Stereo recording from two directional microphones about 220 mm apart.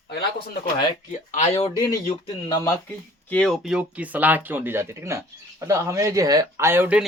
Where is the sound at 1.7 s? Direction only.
15° left (ahead or behind).